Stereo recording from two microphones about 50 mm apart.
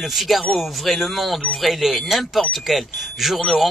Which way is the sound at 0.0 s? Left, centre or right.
Centre.